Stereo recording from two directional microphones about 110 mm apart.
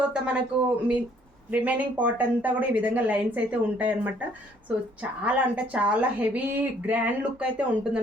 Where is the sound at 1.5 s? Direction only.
15° right (ahead or behind).